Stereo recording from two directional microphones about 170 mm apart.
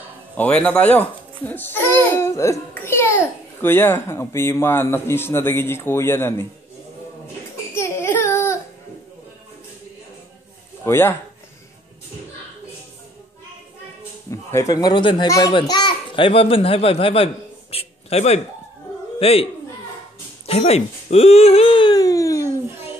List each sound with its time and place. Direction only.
0.4 s a child's voice: 5° left (ahead or behind)
7.7 s baby cry: 15° left (ahead or behind)
10.8 s speech: 15° left (ahead or behind)
14.3 s a child's voice: 20° left (ahead or behind)